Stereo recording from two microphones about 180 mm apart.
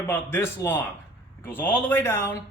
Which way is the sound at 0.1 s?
10° left (ahead or behind).